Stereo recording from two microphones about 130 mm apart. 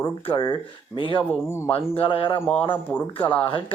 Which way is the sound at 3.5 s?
40° left (ahead or behind).